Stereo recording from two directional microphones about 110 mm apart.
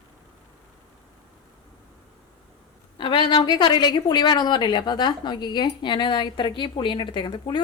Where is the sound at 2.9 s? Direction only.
50° left (ahead or behind).